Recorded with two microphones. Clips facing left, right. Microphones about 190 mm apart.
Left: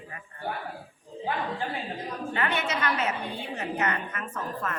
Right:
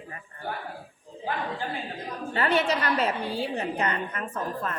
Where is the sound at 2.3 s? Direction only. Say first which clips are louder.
Right 6 dB; 35° right (ahead or behind).